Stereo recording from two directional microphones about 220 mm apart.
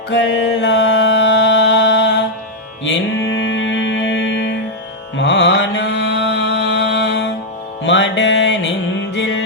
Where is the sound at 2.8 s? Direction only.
55° left (ahead or behind).